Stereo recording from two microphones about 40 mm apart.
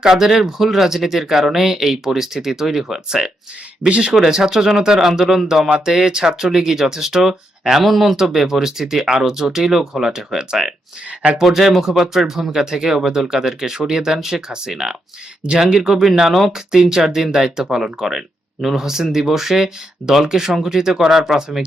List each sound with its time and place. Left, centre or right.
0.0 s speech: centre
3.8 s speech: right
4.1 s speech: centre
7.9 s speech: centre
11.4 s speech: centre